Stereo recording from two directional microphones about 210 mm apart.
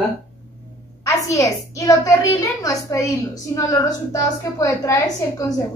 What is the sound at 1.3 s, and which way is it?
A woman's voice, 15° left (ahead or behind).